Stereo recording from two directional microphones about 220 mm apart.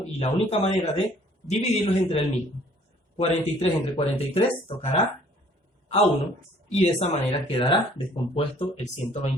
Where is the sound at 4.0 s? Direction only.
25° left (ahead or behind).